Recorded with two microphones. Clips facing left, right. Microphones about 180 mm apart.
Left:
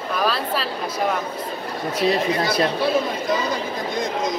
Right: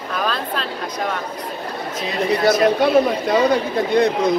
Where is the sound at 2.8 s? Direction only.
65° right (ahead or behind).